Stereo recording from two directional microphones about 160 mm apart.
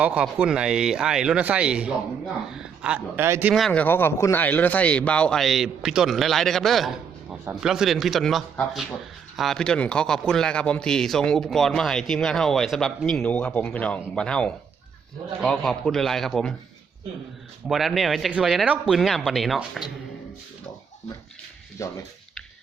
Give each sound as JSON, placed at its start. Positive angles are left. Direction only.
{"t": 0.0, "sound": "speech", "side_deg": -10}
{"t": 3.5, "sound": "a man's voice", "side_deg": 5}
{"t": 17.7, "sound": "a man's voice", "side_deg": 0}
{"t": 21.8, "sound": "speech", "side_deg": 20}